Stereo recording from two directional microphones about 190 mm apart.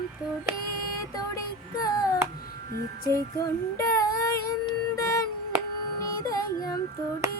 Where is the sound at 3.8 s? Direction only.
15° left (ahead or behind).